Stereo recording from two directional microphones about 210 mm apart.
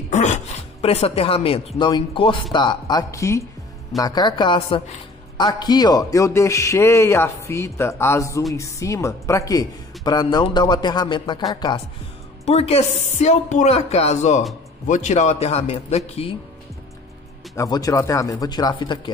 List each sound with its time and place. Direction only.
0.1 s a man's voice: 35° left (ahead or behind)
17.6 s a man's voice: 15° left (ahead or behind)